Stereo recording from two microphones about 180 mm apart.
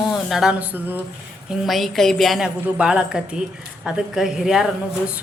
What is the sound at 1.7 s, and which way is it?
A woman's voice, centre (ahead or behind).